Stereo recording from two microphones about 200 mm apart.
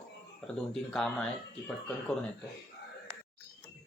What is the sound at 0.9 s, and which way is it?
Speech, 5° left (ahead or behind).